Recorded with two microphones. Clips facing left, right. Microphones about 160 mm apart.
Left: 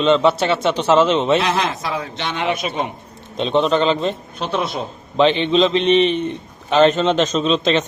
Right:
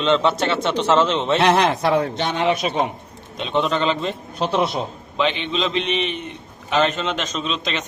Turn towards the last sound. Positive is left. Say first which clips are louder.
# left 9 dB
turn(degrees=30)  # may be behind; listen again after turning